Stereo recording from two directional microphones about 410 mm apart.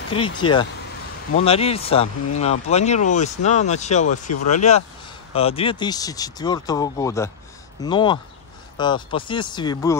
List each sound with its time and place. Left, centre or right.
0.4 s speech: centre